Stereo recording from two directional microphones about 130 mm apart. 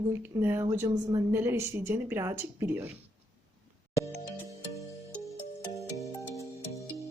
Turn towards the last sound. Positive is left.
turn(degrees=25)  # may be behind; listen again after turning